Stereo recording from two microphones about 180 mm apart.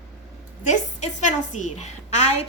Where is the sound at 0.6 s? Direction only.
40° left (ahead or behind).